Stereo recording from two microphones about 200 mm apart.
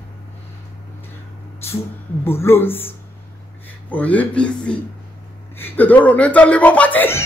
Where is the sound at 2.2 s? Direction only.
10° left (ahead or behind).